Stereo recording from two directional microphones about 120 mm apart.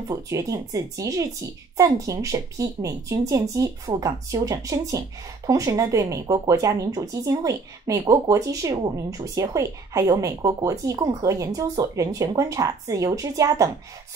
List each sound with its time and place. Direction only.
0.1 s speech: 30° right (ahead or behind)